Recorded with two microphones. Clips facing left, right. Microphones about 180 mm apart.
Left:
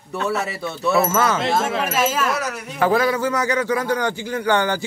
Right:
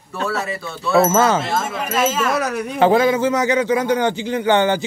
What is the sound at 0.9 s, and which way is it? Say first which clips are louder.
Speech: right 5 dB; 25° right (ahead or behind).